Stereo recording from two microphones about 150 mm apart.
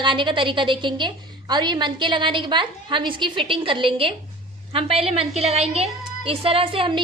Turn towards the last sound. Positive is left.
turn(degrees=-35)  # may be behind; listen again after turning